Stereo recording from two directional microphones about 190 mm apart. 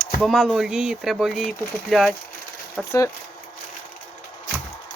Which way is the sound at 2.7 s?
15° left (ahead or behind).